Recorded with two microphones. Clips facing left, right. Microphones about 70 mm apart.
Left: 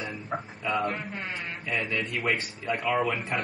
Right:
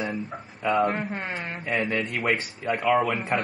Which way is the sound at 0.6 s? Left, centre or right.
Right.